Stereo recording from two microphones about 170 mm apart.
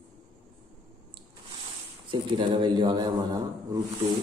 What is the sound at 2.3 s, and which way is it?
A man's voice, 25° right (ahead or behind).